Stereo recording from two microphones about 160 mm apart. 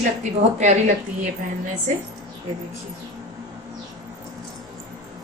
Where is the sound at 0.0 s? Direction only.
50° right (ahead or behind).